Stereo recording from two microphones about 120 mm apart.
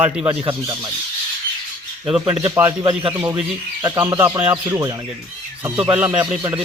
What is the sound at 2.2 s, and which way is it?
Speech, 50° right (ahead or behind).